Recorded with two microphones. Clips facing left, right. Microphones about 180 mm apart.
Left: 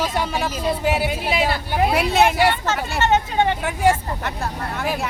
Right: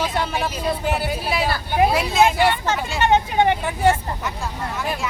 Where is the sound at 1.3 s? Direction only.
25° left (ahead or behind).